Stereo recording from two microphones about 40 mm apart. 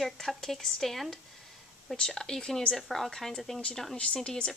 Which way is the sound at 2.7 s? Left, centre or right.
Centre.